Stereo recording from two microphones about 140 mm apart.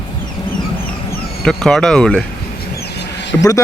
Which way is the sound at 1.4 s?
5° left (ahead or behind).